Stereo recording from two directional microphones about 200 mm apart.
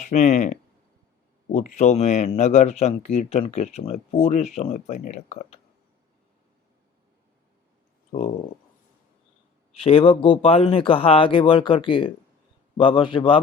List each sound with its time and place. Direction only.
0.0 s speech: 40° left (ahead or behind)
8.1 s speech: 35° left (ahead or behind)
9.7 s speech: 30° left (ahead or behind)